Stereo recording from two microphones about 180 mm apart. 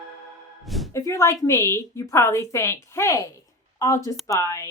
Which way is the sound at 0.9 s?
15° left (ahead or behind).